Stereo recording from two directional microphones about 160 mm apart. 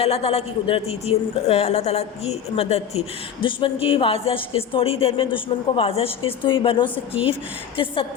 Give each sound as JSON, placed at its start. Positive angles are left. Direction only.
{"t": 0.0, "sound": "speech", "side_deg": 40}